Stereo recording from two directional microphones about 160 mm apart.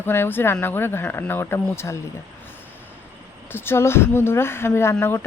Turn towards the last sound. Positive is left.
turn(degrees=15)  # may be behind; listen again after turning